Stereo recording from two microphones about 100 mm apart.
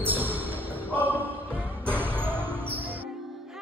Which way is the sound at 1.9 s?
20° right (ahead or behind).